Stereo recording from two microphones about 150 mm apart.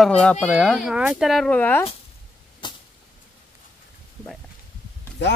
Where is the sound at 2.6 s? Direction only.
30° left (ahead or behind).